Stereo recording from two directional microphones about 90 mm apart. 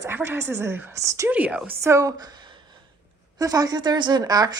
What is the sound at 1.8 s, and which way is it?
Speech, 35° right (ahead or behind).